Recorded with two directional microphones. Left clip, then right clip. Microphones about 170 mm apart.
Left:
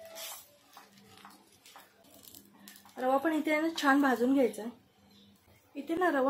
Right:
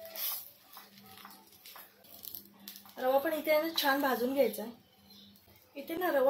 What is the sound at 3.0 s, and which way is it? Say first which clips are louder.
A woman's voice: left 1 dB; 40° left (ahead or behind).